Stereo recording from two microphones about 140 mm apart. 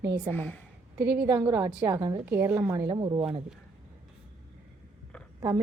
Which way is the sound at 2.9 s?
35° right (ahead or behind).